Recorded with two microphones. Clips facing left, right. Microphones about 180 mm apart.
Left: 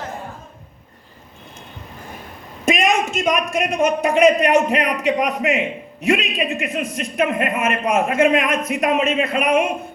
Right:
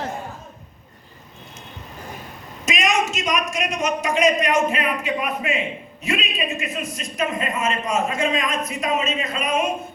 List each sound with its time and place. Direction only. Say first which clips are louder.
2.6 s a man's voice: left 4 dB; 55° left (ahead or behind)